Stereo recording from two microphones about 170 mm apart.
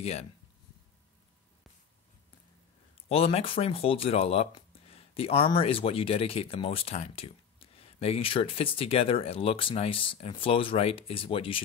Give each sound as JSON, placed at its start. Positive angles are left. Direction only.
{"t": 0.0, "sound": "speech", "side_deg": 35}
{"t": 3.1, "sound": "speech", "side_deg": 35}